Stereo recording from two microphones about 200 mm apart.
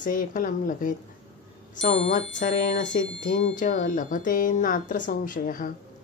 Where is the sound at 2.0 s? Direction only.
40° left (ahead or behind).